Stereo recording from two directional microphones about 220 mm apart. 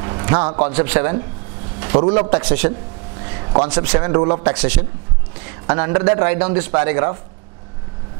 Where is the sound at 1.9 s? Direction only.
25° right (ahead or behind).